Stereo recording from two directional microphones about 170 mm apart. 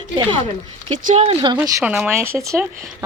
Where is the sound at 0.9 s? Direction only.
40° right (ahead or behind).